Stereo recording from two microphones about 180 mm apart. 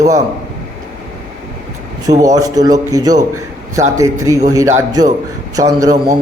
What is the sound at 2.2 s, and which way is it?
A man's voice, 20° right (ahead or behind).